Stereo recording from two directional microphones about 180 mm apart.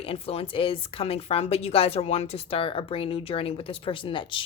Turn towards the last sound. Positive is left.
turn(degrees=25)  # may be behind; listen again after turning